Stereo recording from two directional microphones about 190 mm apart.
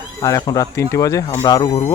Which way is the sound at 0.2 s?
20° left (ahead or behind).